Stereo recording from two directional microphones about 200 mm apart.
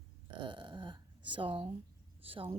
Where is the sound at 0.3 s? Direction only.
25° right (ahead or behind).